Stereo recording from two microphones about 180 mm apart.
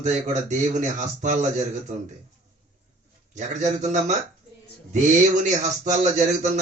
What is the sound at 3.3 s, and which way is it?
Speech, 40° right (ahead or behind).